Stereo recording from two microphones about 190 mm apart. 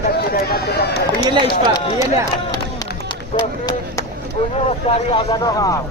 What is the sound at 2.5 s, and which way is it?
Crowd, 20° left (ahead or behind).